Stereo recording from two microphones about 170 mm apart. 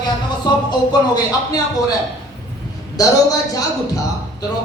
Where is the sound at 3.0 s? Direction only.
20° left (ahead or behind).